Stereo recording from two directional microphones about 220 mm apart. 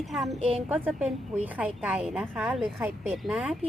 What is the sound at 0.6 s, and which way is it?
A woman's voice, 5° right (ahead or behind).